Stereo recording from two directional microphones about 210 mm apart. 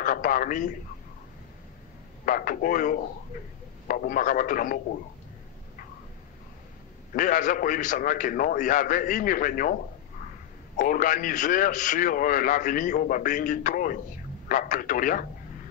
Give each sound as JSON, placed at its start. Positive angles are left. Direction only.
{"t": 0.0, "sound": "a man's voice", "side_deg": 40}
{"t": 2.2, "sound": "a man's voice", "side_deg": 40}
{"t": 7.2, "sound": "a man's voice", "side_deg": 40}
{"t": 10.8, "sound": "a man's voice", "side_deg": 40}